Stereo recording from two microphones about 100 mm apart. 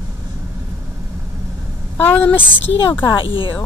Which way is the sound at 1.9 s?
15° left (ahead or behind).